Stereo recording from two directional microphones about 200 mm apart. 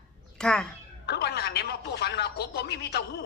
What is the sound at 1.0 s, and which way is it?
Speech, 55° left (ahead or behind).